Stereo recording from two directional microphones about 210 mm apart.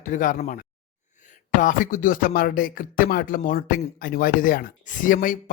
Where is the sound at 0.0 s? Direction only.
40° left (ahead or behind).